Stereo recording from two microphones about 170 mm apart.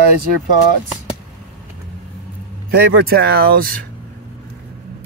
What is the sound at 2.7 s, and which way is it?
Speech, 65° right (ahead or behind).